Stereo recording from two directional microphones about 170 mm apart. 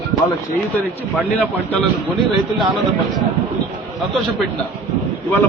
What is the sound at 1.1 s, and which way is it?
Speech, 10° left (ahead or behind).